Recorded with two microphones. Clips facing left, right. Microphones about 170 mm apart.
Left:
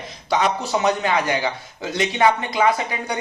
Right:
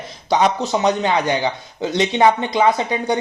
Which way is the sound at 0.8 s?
20° right (ahead or behind).